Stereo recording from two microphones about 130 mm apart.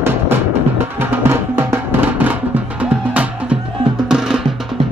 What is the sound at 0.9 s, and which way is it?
Music, 15° right (ahead or behind).